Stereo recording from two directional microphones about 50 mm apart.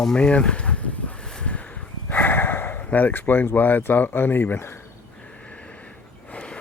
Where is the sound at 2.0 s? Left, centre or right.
Left.